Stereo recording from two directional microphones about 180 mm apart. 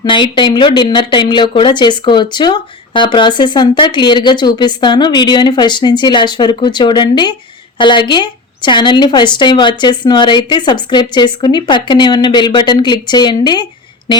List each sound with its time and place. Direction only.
0.0 s speech: 25° left (ahead or behind)